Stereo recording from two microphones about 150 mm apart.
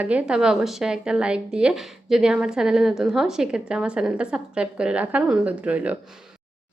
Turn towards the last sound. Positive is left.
turn(degrees=-10)  # may be behind; listen again after turning